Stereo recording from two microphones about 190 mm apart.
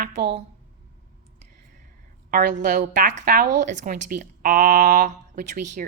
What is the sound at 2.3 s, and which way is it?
A woman's voice, 45° right (ahead or behind).